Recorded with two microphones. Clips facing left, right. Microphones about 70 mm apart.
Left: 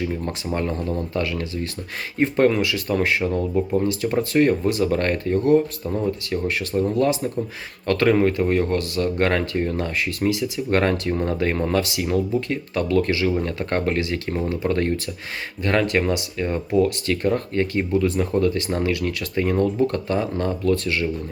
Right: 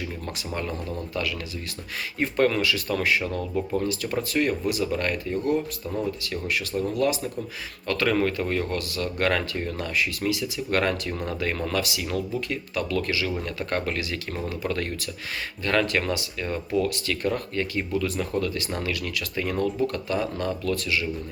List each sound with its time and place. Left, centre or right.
0.3 s speech: left
6.3 s speech: left
8.1 s speech: left